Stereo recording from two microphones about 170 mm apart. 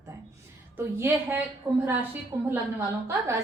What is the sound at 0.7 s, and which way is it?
A woman's voice, 10° right (ahead or behind).